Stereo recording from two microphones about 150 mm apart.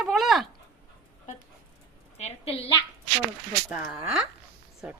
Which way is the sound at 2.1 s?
45° left (ahead or behind).